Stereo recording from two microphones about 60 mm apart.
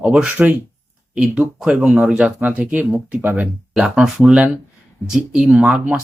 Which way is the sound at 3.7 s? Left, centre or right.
Centre.